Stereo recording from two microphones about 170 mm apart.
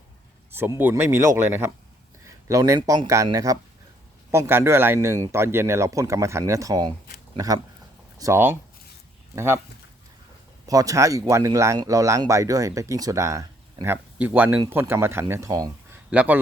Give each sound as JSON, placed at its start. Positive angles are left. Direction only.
{"t": 0.5, "sound": "speech", "side_deg": -15}
{"t": 10.7, "sound": "speech", "side_deg": -20}
{"t": 16.0, "sound": "speech", "side_deg": -10}